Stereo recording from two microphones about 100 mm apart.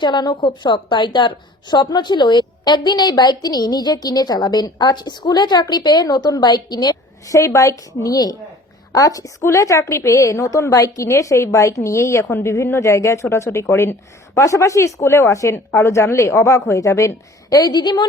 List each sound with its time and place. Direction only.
0.0 s a woman's voice: 45° left (ahead or behind)